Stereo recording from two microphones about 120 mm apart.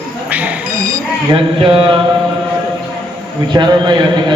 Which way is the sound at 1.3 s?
50° right (ahead or behind).